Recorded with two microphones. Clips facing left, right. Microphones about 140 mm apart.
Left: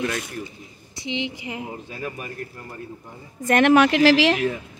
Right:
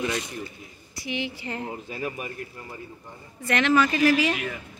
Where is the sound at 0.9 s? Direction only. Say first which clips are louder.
Left 3 dB; 20° left (ahead or behind).